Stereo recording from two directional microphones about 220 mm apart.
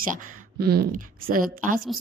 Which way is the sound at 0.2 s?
45° right (ahead or behind).